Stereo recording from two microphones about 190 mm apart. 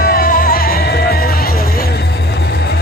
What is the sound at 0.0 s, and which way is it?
Music, 50° left (ahead or behind).